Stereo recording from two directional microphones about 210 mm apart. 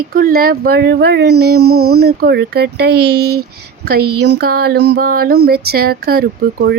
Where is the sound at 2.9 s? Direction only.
90° right.